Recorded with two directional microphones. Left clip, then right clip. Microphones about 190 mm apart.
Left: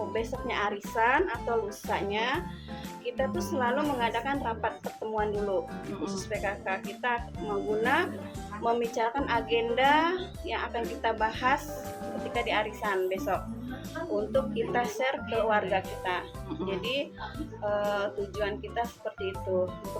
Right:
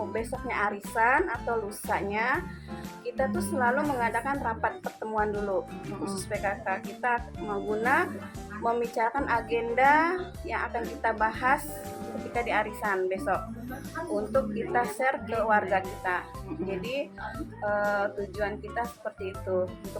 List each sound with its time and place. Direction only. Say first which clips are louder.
0.1 s speech: even; centre (ahead or behind)
7.4 s speech: even; 20° left (ahead or behind)
7.7 s speech: right 2 dB; centre (ahead or behind)